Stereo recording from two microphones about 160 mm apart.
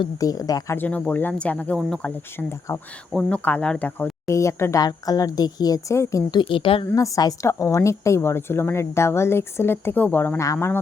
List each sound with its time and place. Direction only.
0.0 s speech: 20° left (ahead or behind)
0.8 s a woman's voice: 10° left (ahead or behind); by 6.8 s 35° left (ahead or behind)
6.9 s a woman's voice: 20° left (ahead or behind)